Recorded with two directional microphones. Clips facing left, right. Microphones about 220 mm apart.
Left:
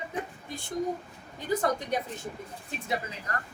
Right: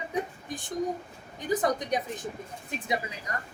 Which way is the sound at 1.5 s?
15° right (ahead or behind).